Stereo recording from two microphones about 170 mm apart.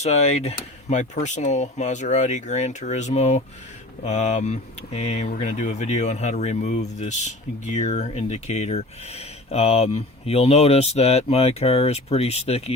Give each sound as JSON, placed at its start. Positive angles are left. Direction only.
{"t": 0.0, "sound": "speech", "side_deg": 40}